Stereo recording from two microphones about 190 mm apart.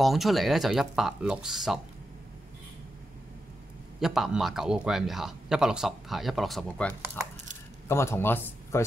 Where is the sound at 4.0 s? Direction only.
Centre (ahead or behind).